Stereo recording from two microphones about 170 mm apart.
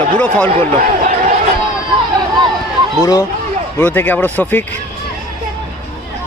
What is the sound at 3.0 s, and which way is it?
Speech, 20° left (ahead or behind).